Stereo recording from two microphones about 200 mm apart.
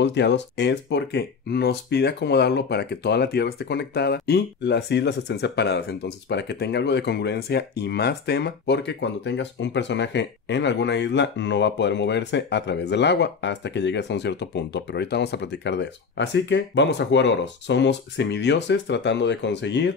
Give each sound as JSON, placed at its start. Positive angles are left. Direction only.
{"t": 0.0, "sound": "speech", "side_deg": 60}